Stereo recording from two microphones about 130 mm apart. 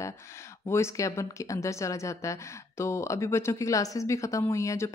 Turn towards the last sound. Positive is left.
turn(degrees=25)  # may be behind; listen again after turning